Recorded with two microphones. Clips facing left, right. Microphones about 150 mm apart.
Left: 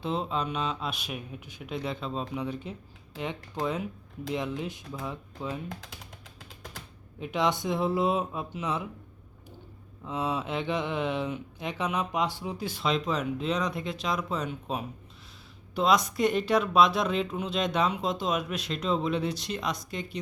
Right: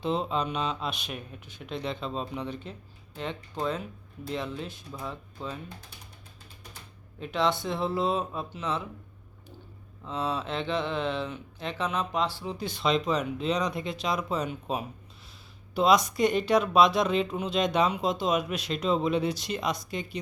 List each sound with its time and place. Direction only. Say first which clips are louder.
0.0 s speech: right 2 dB; centre (ahead or behind)
5.6 s speech: left 5 dB; 90° left
7.2 s speech: even; 15° left (ahead or behind)
10.0 s speech: even; 15° left (ahead or behind); by 20.1 s centre (ahead or behind)